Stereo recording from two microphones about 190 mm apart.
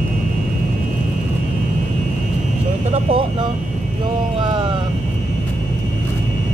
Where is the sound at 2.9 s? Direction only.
30° right (ahead or behind).